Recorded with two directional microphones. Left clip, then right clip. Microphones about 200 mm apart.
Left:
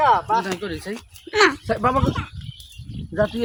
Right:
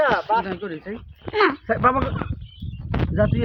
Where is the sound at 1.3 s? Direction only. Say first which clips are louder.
Left 2 dB; 10° left (ahead or behind).